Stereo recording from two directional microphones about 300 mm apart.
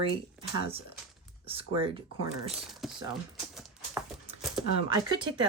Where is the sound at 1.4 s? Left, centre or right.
Centre.